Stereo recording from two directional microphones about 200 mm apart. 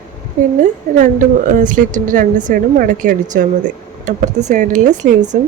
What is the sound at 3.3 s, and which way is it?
Speech, 55° right (ahead or behind).